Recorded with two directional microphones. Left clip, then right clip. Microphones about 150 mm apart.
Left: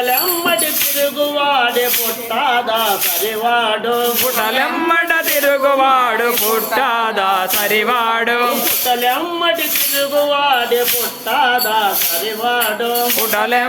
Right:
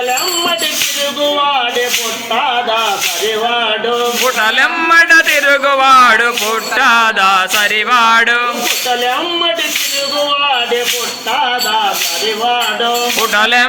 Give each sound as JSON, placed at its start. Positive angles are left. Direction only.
{"t": 4.4, "sound": "a man's voice", "side_deg": 15}
{"t": 6.7, "sound": "music", "side_deg": 20}
{"t": 13.3, "sound": "a man's voice", "side_deg": 10}